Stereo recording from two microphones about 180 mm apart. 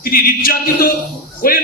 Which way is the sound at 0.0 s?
55° left (ahead or behind).